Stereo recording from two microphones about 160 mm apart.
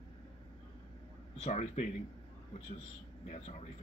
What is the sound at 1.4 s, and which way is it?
Speech, 40° left (ahead or behind).